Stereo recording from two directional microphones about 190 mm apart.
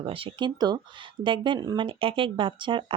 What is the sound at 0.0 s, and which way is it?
Speech, 30° right (ahead or behind).